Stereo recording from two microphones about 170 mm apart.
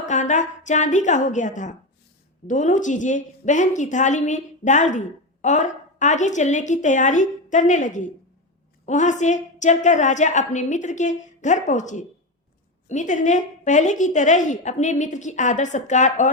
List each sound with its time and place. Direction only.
0.0 s a woman's voice: 45° left (ahead or behind)